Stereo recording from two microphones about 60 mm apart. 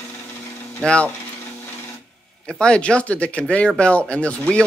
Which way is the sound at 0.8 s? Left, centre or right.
Centre.